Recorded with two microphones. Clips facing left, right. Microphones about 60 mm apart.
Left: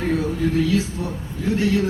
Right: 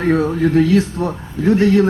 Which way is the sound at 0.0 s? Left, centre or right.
Right.